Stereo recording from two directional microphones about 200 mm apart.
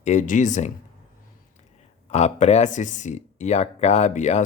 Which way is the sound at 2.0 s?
35° left (ahead or behind).